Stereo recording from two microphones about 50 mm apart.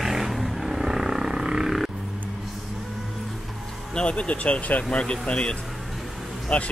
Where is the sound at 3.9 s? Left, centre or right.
Left.